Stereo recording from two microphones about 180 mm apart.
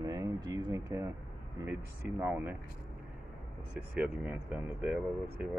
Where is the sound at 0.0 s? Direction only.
20° right (ahead or behind).